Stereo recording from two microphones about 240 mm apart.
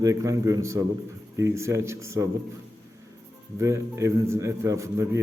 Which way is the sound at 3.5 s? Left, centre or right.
Centre.